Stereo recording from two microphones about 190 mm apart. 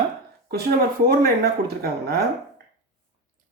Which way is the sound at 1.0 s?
50° right (ahead or behind).